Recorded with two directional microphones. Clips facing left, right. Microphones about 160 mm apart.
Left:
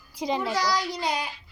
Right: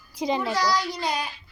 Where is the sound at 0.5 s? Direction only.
20° left (ahead or behind).